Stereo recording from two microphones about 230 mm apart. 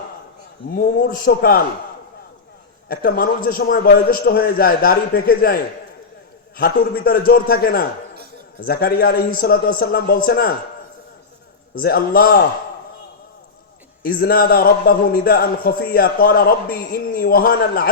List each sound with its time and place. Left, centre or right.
1.0 s a man's voice: left
2.9 s a man's voice: left
6.6 s a man's voice: left
11.7 s a man's voice: left
14.0 s a man's voice: left